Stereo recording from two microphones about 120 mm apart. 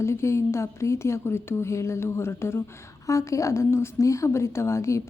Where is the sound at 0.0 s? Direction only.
25° left (ahead or behind).